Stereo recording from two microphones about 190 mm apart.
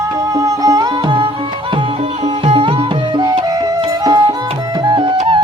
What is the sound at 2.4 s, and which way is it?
Music, 30° right (ahead or behind).